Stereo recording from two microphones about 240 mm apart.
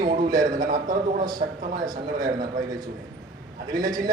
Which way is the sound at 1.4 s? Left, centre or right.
Right.